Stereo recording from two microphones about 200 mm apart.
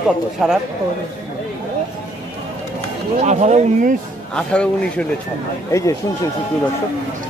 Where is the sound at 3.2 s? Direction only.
35° right (ahead or behind).